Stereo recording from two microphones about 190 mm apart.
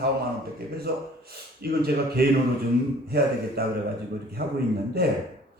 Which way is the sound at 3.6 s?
55° right (ahead or behind).